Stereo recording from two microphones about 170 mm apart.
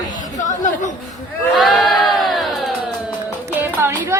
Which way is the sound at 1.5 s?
Centre (ahead or behind).